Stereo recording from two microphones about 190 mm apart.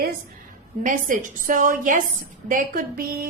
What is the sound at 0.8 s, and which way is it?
A woman's voice, 45° right (ahead or behind).